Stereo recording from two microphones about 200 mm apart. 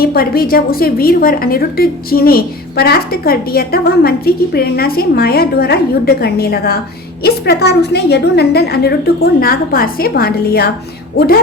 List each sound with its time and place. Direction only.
0.0 s a woman's voice: 50° left (ahead or behind)